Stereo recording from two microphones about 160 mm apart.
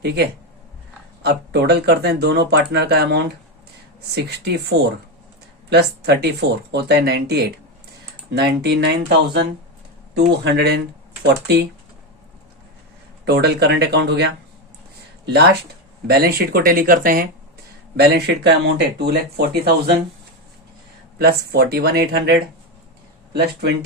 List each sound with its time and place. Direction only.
0.0 s speech: 90° right
13.2 s speech: 90° right
16.0 s speech: 75° right (ahead or behind)
17.9 s speech: 85° right
21.2 s speech: 80° right